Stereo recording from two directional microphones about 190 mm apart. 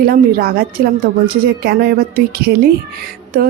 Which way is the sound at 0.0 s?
50° right (ahead or behind).